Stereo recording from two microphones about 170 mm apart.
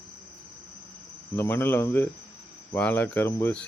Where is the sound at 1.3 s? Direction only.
15° left (ahead or behind).